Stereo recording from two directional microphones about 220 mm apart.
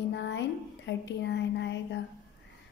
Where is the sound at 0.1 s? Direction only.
55° left (ahead or behind).